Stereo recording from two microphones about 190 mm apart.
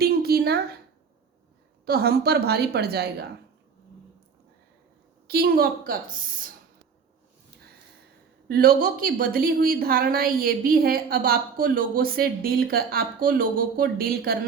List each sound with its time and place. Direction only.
0.0 s a sound: 55° right (ahead or behind)
1.8 s a woman's voice: 55° right (ahead or behind)
5.3 s a woman's voice: 55° right (ahead or behind)
8.4 s a woman's voice: 50° right (ahead or behind)